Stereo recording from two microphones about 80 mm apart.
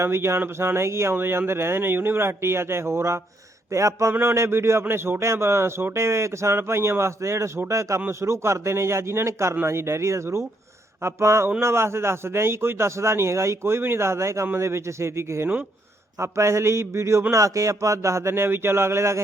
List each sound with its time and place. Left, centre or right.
0.0 s a man's voice: right